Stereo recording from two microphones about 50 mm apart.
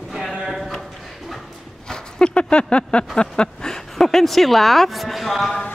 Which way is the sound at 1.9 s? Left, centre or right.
Centre.